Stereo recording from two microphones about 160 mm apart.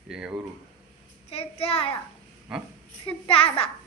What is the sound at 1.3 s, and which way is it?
Speech, 40° left (ahead or behind).